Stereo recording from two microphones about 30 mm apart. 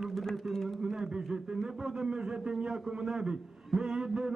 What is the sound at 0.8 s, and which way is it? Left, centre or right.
A man's voice, right.